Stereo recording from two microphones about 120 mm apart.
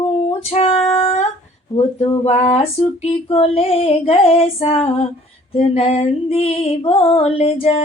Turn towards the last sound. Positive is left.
turn(degrees=50)  # may be behind; listen again after turning